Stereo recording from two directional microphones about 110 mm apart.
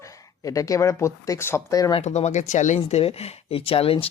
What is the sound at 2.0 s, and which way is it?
Speech, 85° left.